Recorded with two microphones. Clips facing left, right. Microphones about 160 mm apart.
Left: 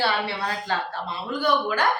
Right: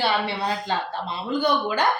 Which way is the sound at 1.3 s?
20° right (ahead or behind).